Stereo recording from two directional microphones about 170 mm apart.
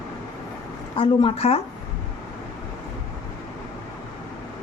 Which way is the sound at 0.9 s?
35° left (ahead or behind).